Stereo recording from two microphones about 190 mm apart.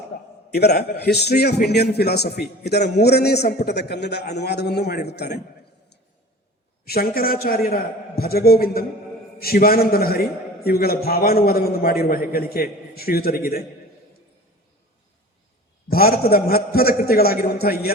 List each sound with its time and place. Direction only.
0.5 s a man's voice: 60° left (ahead or behind)
6.8 s a man's voice: 55° left (ahead or behind)
15.9 s a man's voice: 55° left (ahead or behind)